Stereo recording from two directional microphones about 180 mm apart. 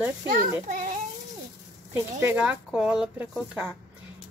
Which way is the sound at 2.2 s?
10° right (ahead or behind).